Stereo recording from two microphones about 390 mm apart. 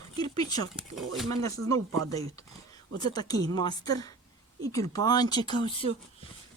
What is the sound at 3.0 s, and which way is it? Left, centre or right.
A woman's voice, centre.